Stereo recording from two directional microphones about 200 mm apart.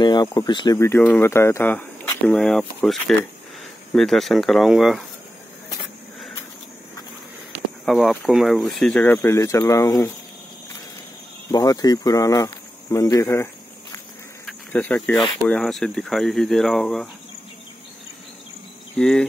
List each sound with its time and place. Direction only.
0.0 s speech: 20° left (ahead or behind); by 5.0 s centre (ahead or behind)
7.8 s speech: centre (ahead or behind); by 10.1 s 15° left (ahead or behind)
11.5 s speech: 20° left (ahead or behind); by 17.1 s centre (ahead or behind)
18.9 s speech: 5° left (ahead or behind)